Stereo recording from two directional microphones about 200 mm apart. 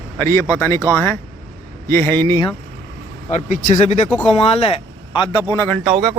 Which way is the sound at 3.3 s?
40° left (ahead or behind).